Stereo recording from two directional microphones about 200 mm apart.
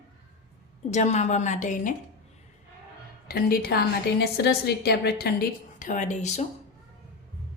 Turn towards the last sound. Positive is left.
turn(degrees=35)  # may be behind; listen again after turning